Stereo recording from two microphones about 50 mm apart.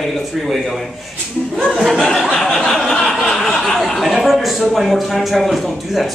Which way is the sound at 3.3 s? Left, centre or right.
Centre.